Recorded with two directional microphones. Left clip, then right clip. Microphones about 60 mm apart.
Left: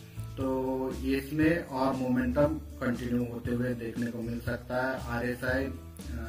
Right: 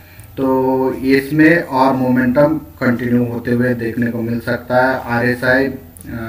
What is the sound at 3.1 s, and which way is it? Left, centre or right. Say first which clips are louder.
Speech: right 16 dB; centre.